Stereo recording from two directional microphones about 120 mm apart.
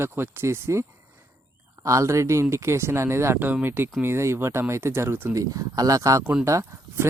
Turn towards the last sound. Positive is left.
turn(degrees=-25)  # may be behind; listen again after turning